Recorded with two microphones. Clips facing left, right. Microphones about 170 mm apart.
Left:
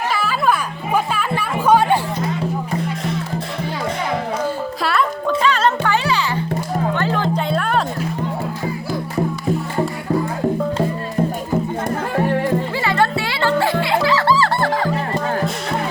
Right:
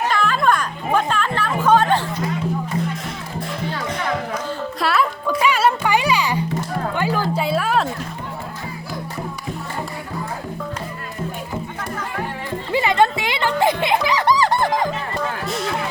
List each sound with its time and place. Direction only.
0.1 s music: 5° left (ahead or behind)
4.8 s music: centre (ahead or behind)
12.7 s music: 20° right (ahead or behind)